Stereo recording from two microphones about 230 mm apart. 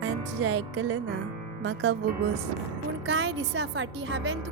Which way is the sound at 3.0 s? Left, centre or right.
Right.